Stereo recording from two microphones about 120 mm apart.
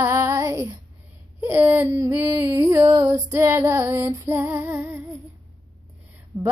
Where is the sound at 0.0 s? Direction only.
20° right (ahead or behind).